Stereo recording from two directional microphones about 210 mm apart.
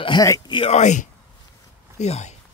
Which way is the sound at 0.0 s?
20° left (ahead or behind).